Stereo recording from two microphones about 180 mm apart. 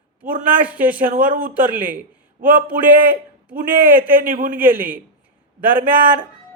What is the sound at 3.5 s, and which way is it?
Speech, 50° right (ahead or behind).